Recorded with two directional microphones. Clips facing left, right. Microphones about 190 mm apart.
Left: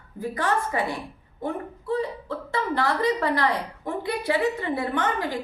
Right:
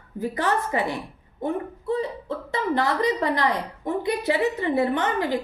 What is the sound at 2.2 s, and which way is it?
A woman's voice, 20° right (ahead or behind).